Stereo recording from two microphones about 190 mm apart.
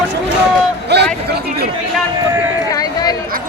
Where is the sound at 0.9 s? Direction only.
60° right (ahead or behind).